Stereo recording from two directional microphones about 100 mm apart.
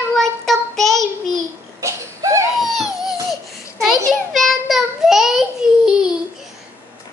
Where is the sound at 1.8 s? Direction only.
30° right (ahead or behind).